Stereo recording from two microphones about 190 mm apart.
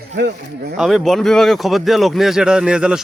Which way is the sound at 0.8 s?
Centre (ahead or behind).